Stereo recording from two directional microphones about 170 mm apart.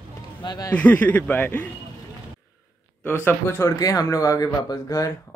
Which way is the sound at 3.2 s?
15° left (ahead or behind).